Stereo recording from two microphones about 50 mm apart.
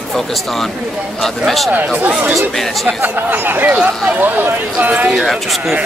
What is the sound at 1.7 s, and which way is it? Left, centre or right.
Speech, right.